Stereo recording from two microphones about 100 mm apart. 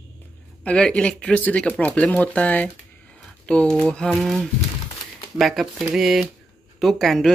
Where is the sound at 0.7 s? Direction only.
10° left (ahead or behind).